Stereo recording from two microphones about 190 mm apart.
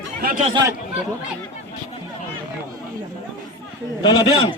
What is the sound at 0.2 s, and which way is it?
Speech, 50° right (ahead or behind).